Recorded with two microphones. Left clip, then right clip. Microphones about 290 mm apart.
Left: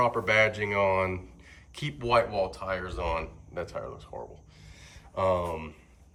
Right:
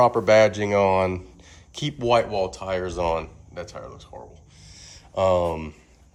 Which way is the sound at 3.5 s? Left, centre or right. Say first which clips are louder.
Left 3 dB; centre.